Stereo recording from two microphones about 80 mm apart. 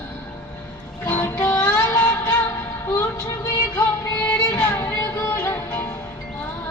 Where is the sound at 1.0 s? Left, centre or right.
Left.